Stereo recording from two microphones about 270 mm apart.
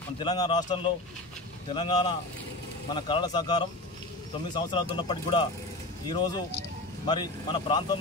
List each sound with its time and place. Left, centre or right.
0.2 s speech: centre